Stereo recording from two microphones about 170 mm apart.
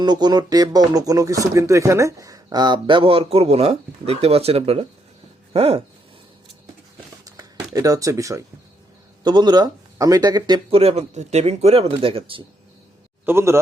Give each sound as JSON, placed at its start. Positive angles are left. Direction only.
{"t": 0.0, "sound": "speech", "side_deg": -25}
{"t": 7.3, "sound": "a sound", "side_deg": -20}
{"t": 9.2, "sound": "speech", "side_deg": -25}
{"t": 13.2, "sound": "a man's voice", "side_deg": -15}